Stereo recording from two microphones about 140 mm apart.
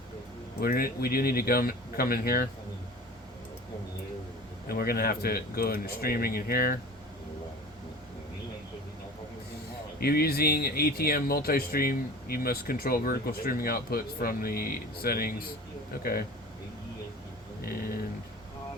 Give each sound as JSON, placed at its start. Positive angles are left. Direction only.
{"t": 0.6, "sound": "speech", "side_deg": 90}
{"t": 4.7, "sound": "speech", "side_deg": 90}
{"t": 10.0, "sound": "speech", "side_deg": 90}